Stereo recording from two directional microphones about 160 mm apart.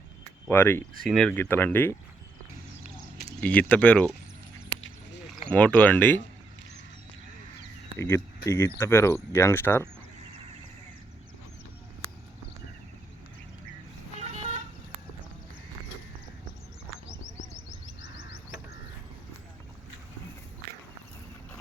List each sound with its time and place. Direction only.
0.4 s speech: 15° left (ahead or behind)
1.0 s speech: 5° left (ahead or behind)
3.4 s speech: 10° left (ahead or behind)
5.3 s speech: 10° left (ahead or behind)
7.9 s speech: 15° left (ahead or behind)
14.2 s vehicle: 45° right (ahead or behind)